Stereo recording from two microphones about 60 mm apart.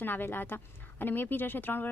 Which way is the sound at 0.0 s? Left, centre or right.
Left.